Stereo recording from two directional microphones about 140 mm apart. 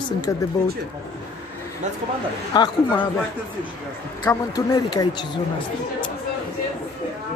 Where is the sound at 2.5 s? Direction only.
30° left (ahead or behind).